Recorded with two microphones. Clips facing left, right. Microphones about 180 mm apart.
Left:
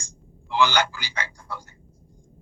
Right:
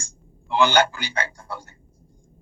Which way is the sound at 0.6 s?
55° right (ahead or behind).